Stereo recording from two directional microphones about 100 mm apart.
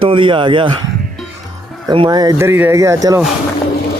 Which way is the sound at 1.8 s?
50° right (ahead or behind).